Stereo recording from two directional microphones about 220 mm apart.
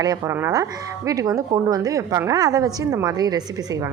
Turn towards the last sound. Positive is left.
turn(degrees=-15)  # may be behind; listen again after turning